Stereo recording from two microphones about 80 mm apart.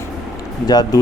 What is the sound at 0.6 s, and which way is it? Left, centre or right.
Speech, left.